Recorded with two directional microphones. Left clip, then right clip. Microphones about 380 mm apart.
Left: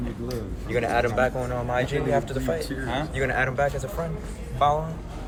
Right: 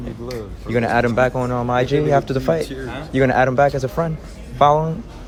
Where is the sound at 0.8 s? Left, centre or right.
Centre.